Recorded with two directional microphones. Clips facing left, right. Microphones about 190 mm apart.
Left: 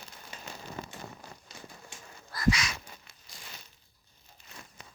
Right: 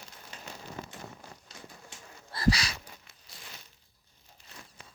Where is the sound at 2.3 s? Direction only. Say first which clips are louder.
Even; 30° right (ahead or behind).